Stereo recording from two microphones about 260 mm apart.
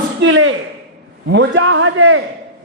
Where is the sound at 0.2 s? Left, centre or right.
Right.